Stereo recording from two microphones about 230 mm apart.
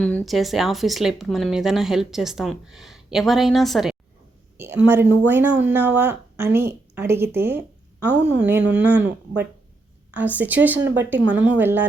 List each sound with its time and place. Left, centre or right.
0.0 s speech: centre
8.0 s a woman's voice: right
8.4 s speech: centre